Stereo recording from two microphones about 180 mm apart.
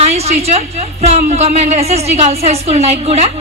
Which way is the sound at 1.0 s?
35° right (ahead or behind).